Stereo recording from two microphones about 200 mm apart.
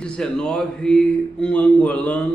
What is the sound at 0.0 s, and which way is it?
A man's voice, 5° left (ahead or behind).